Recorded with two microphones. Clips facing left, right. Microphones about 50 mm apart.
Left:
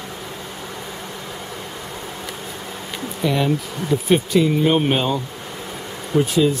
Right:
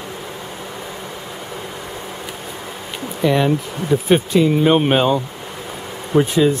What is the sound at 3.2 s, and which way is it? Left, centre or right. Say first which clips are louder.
Speech: right 4 dB; right.